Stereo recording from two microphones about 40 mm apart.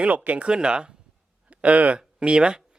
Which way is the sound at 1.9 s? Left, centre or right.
Right.